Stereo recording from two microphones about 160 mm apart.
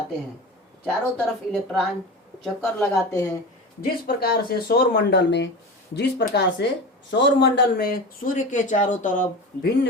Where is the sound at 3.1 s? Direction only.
20° left (ahead or behind).